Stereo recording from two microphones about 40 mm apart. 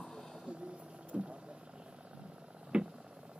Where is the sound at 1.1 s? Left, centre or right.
Right.